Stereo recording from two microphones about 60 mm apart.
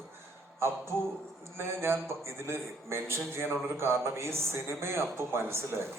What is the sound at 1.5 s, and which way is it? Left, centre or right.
A man's voice, right.